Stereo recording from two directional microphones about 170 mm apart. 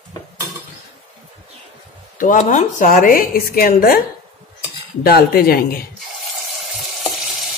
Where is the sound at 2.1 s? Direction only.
50° left (ahead or behind).